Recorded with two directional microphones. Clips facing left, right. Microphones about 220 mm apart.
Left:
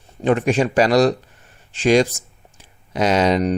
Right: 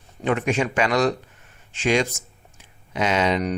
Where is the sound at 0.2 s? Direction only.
35° left (ahead or behind).